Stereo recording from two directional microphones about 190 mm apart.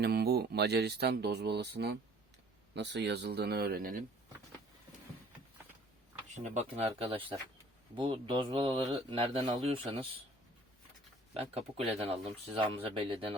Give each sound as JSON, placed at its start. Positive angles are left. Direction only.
{"t": 0.0, "sound": "speech", "side_deg": -55}
{"t": 6.3, "sound": "speech", "side_deg": -40}
{"t": 11.3, "sound": "speech", "side_deg": -30}